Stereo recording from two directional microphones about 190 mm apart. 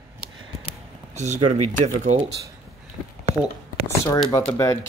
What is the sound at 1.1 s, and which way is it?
Speech, 35° right (ahead or behind).